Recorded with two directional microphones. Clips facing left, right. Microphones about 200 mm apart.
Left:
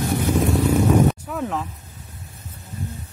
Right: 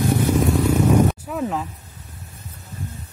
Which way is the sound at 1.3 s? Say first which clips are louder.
Right 2 dB; 5° right (ahead or behind).